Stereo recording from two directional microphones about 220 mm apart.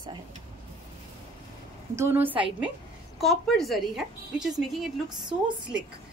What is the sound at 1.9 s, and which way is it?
A woman's voice, 10° right (ahead or behind).